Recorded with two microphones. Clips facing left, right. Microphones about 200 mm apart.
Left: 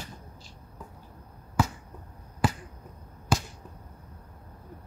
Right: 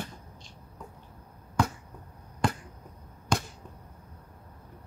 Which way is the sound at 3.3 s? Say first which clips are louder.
Left 1 dB; 5° left (ahead or behind).